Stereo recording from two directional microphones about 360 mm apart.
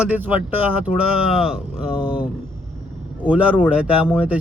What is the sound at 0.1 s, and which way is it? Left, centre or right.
Speech, centre.